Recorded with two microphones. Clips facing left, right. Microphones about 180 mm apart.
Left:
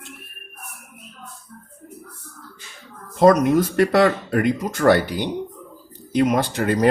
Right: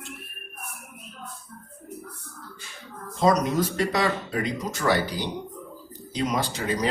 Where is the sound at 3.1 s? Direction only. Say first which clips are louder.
Left 7 dB; 55° left (ahead or behind).